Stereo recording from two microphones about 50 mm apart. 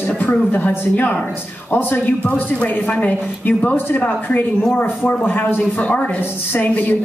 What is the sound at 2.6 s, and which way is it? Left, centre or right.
A woman's voice, left.